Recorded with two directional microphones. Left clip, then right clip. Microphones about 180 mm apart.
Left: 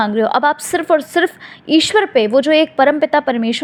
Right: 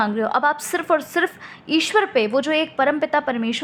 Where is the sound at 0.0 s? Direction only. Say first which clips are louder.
Left 5 dB; 20° left (ahead or behind).